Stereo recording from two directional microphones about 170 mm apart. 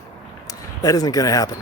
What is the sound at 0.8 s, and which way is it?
Speech, 20° left (ahead or behind).